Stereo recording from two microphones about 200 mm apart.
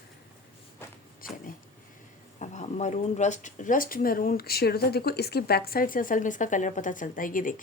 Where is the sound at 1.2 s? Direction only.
45° left (ahead or behind).